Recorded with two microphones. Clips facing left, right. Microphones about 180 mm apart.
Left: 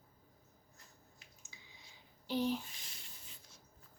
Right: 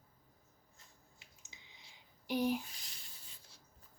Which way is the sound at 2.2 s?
15° right (ahead or behind).